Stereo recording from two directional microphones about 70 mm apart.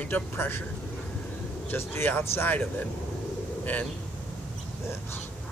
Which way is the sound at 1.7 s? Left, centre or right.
Left.